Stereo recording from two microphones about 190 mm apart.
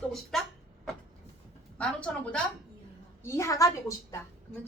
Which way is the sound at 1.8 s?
5° left (ahead or behind).